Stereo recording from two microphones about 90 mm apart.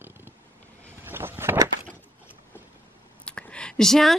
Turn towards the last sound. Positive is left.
turn(degrees=5)  # may be behind; listen again after turning